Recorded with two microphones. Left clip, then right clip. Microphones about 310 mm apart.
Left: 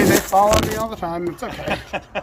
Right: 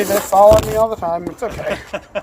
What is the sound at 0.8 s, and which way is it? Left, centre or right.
Speech, centre.